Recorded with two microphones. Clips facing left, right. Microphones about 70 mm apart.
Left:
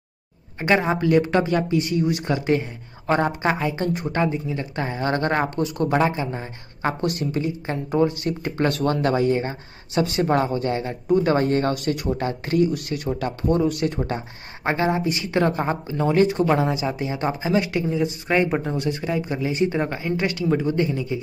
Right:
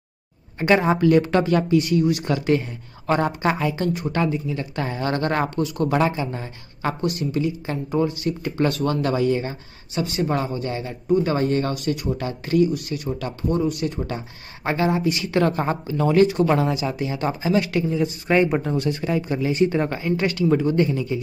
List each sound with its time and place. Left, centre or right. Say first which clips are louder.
0.6 s speech: right 2 dB; centre
1.8 s speech: right 2 dB; left
4.3 s speech: right 1 dB; left
7.0 s speech: right 1 dB; left
9.0 s speech: left 1 dB; left
9.9 s speech: left 3 dB; left
14.6 s speech: even; left; by 21.2 s centre